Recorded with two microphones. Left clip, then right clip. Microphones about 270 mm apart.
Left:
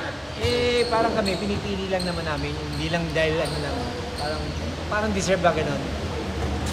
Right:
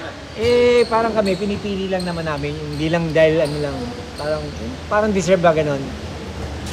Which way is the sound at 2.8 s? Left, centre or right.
Right.